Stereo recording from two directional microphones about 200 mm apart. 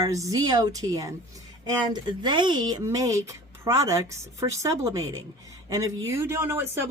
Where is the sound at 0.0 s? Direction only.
15° right (ahead or behind).